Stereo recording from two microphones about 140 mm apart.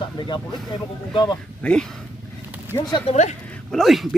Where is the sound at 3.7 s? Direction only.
Centre (ahead or behind).